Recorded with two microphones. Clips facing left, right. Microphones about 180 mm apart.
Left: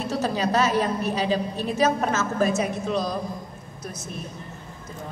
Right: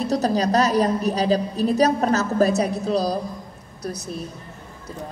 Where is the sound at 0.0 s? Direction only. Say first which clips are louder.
Right 4 dB; 40° right (ahead or behind).